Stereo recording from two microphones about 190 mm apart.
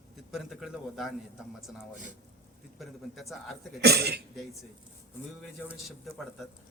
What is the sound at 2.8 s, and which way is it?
Speech, centre (ahead or behind).